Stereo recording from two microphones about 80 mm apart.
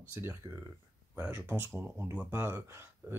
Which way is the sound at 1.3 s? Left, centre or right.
Right.